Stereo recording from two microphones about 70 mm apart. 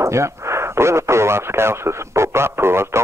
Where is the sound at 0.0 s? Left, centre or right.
Right.